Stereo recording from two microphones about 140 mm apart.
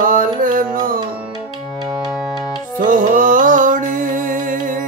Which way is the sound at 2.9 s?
75° right (ahead or behind).